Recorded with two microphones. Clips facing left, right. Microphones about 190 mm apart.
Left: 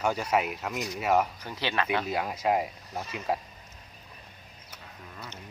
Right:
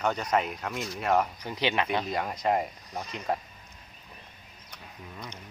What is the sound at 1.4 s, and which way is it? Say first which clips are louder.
Speech: right 2 dB; 15° right (ahead or behind).